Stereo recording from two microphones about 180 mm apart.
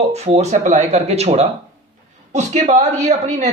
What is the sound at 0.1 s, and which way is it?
Speech, 35° right (ahead or behind).